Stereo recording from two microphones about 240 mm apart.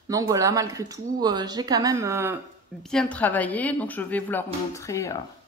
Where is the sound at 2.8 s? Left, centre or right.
Centre.